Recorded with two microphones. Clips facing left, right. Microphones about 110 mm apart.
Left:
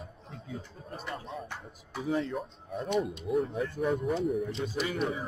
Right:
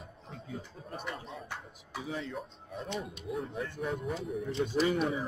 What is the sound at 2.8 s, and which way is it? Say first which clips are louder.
Speech: left 8 dB; 65° left (ahead or behind).